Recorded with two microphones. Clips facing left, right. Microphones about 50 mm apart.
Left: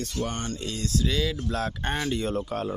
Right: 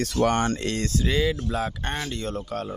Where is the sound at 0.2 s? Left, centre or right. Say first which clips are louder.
Right 10 dB; right.